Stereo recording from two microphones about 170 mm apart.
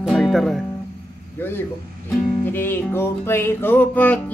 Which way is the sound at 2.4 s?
10° left (ahead or behind).